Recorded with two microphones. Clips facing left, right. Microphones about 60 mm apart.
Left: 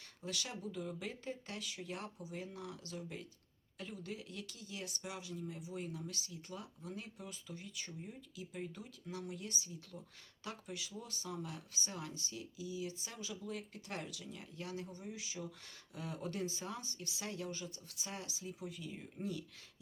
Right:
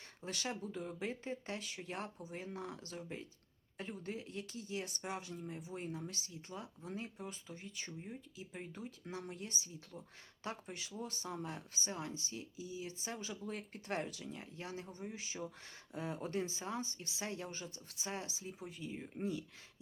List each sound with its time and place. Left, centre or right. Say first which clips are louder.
0.3 s speech: right 2 dB; right
8.0 s speech: right 1 dB; right